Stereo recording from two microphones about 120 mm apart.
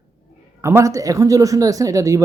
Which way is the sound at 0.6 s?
25° right (ahead or behind).